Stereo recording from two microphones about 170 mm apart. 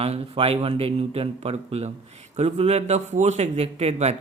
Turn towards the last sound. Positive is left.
turn(degrees=-40)  # may be behind; listen again after turning